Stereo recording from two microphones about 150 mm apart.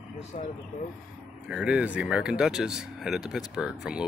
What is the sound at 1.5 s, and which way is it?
Speech, 5° right (ahead or behind).